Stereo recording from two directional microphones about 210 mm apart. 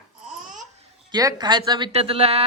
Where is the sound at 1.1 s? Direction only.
20° right (ahead or behind).